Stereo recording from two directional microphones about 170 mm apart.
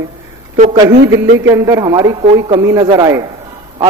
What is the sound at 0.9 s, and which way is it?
Speech, 90° right.